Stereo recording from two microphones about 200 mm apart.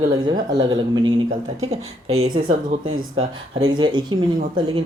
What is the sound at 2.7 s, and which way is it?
Speech, 25° right (ahead or behind).